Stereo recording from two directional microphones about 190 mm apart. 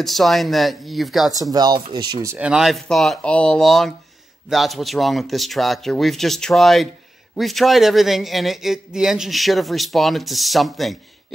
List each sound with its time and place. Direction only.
0.0 s a man's voice: centre (ahead or behind)
1.5 s speech: 20° right (ahead or behind)
2.3 s a man's voice: 5° right (ahead or behind)